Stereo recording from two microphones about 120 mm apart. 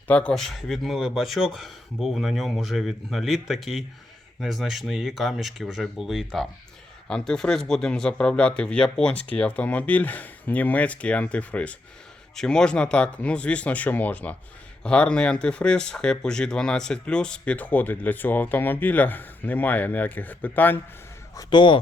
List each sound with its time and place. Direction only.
0.1 s speech: 10° left (ahead or behind)
21.3 s speech: 40° left (ahead or behind)